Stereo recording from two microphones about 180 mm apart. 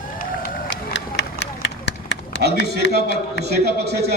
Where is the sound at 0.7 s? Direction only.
85° left.